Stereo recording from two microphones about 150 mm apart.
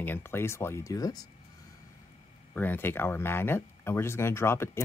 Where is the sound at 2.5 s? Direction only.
15° left (ahead or behind).